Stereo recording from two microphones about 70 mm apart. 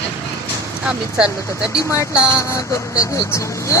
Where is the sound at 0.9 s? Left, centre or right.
Centre.